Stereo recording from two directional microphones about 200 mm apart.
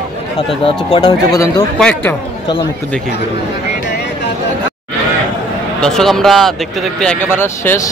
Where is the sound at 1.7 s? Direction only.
5° left (ahead or behind).